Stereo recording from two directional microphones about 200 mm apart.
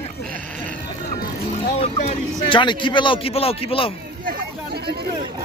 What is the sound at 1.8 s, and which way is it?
A man's voice, 30° left (ahead or behind).